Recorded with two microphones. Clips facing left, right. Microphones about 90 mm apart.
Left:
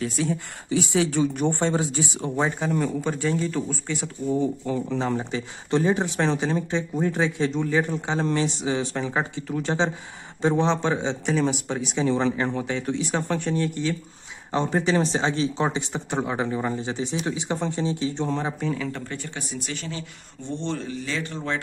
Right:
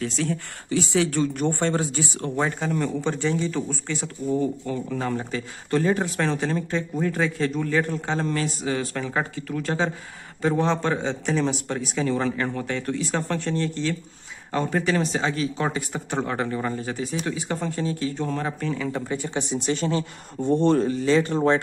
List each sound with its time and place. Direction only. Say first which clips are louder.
0.0 s speech: left 1 dB; 10° left (ahead or behind)
3.8 s speech: even; 15° left (ahead or behind)
18.9 s speech: right 5 dB; 10° right (ahead or behind); by 21.4 s 35° right (ahead or behind)